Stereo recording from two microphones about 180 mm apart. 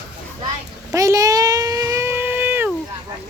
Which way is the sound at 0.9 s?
20° right (ahead or behind).